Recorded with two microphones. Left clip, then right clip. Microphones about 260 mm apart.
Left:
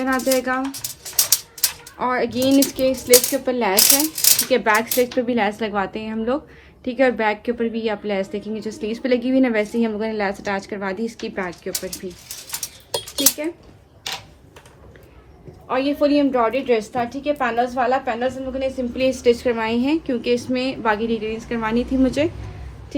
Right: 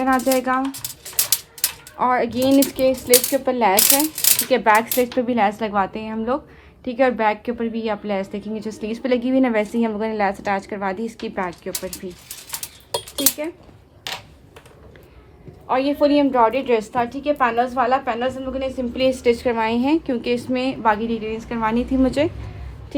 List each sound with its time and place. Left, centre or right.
0.0 s a woman's voice: right
2.0 s a woman's voice: right
15.6 s a woman's voice: right
22.0 s speech: right